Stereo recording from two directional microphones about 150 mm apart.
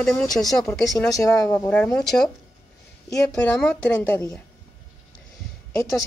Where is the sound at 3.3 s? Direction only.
5° left (ahead or behind).